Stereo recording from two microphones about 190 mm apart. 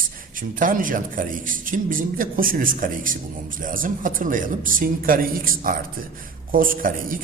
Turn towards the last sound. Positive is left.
turn(degrees=-50)  # may be behind; listen again after turning